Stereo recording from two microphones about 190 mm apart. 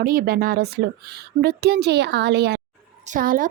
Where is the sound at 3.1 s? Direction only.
45° right (ahead or behind).